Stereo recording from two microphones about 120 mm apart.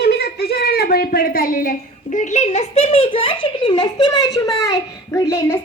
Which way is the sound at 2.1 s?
85° left.